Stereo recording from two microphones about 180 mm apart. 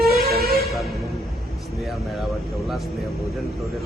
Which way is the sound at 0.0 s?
60° right (ahead or behind).